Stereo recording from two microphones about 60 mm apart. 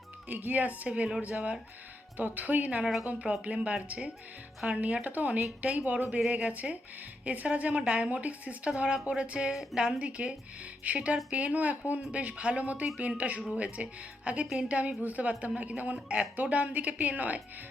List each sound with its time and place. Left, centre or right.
0.3 s a woman's voice: right